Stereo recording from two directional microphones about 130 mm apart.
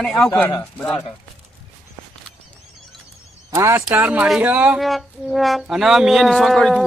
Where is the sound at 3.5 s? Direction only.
20° right (ahead or behind).